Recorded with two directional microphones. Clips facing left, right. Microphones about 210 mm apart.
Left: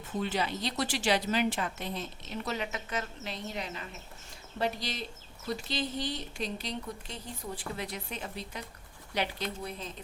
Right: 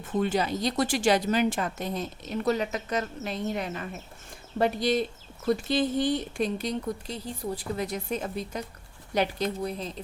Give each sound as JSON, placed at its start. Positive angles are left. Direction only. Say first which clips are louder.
{"t": 0.2, "sound": "a woman's voice", "louder": "right 6 dB", "side_deg": -45}